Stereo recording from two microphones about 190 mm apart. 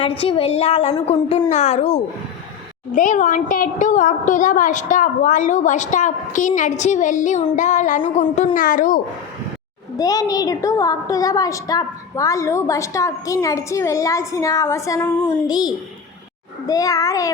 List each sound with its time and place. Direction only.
0.2 s a woman's voice: 30° left (ahead or behind)
10.0 s a woman's voice: 20° left (ahead or behind)